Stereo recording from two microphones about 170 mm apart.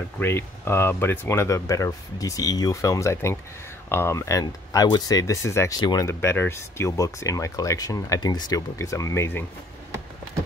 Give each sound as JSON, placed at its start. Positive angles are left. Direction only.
{"t": 0.2, "sound": "speech", "side_deg": 15}